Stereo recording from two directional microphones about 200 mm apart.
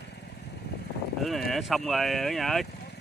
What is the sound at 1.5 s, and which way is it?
Speech, centre (ahead or behind).